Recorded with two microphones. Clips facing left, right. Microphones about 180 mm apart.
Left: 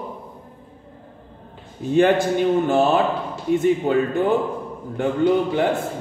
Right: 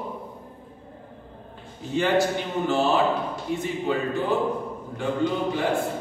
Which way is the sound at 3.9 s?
50° left (ahead or behind).